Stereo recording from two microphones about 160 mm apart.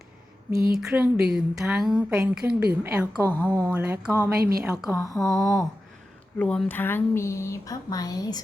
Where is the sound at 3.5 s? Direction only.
10° right (ahead or behind).